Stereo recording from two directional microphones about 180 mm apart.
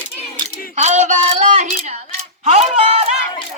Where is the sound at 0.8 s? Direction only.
40° right (ahead or behind).